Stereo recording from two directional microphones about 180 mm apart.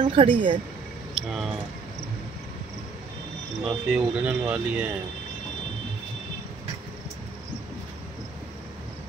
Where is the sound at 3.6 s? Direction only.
5° right (ahead or behind).